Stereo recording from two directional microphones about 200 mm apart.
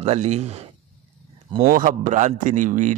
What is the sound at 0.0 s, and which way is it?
Speech, 35° right (ahead or behind).